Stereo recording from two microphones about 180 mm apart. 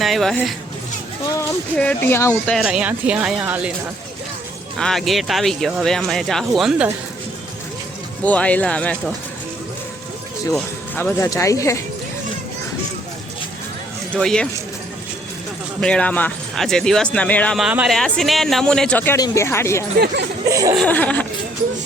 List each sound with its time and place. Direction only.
0.0 s speech: centre (ahead or behind)
1.3 s speech: 10° left (ahead or behind)
2.6 s speech: 5° right (ahead or behind)
4.8 s speech: centre (ahead or behind)
8.2 s speech: 10° left (ahead or behind)
10.5 s speech: 10° left (ahead or behind)
14.1 s speech: 5° left (ahead or behind)
15.8 s speech: 5° left (ahead or behind)
20.5 s speech: 15° right (ahead or behind)
20.7 s speech: 10° left (ahead or behind)